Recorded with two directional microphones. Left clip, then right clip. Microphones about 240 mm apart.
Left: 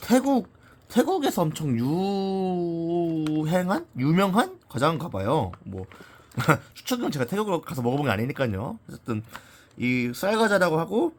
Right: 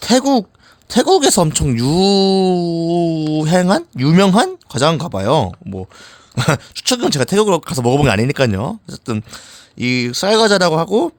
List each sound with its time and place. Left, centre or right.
0.0 s speech: right